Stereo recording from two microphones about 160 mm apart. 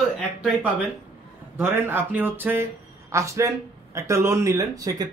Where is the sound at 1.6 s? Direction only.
15° right (ahead or behind).